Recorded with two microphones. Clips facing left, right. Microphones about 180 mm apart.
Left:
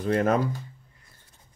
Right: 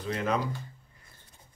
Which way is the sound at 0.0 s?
50° left (ahead or behind).